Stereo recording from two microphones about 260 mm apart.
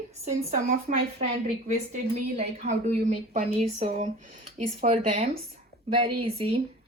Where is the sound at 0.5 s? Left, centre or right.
Right.